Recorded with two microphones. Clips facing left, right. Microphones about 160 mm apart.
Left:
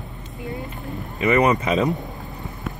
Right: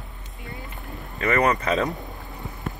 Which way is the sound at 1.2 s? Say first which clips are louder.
Left 4 dB; 20° left (ahead or behind).